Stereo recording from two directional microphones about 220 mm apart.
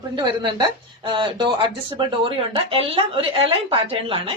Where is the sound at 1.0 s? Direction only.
20° right (ahead or behind).